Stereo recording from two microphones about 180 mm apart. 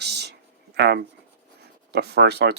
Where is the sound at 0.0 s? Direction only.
65° right (ahead or behind).